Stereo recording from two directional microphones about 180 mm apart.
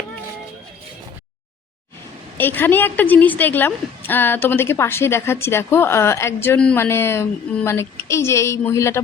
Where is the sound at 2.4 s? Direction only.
10° left (ahead or behind).